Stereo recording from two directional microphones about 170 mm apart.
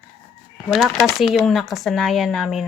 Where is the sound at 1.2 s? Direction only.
Centre (ahead or behind).